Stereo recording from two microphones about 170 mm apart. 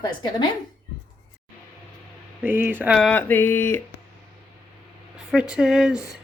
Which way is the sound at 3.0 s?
5° left (ahead or behind).